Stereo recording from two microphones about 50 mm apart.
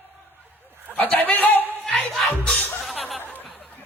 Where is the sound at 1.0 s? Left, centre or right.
Left.